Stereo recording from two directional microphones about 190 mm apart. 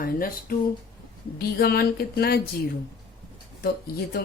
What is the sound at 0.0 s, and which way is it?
Speech, 50° left (ahead or behind).